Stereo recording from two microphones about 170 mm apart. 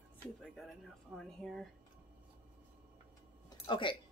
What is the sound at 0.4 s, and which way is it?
Speech, centre (ahead or behind).